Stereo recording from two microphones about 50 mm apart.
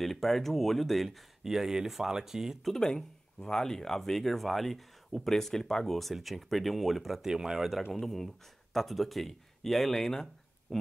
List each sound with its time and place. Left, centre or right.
0.0 s speech: centre
2.6 s speech: centre
7.9 s speech: centre